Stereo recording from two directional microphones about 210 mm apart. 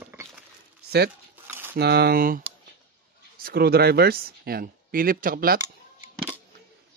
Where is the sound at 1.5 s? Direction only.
10° right (ahead or behind).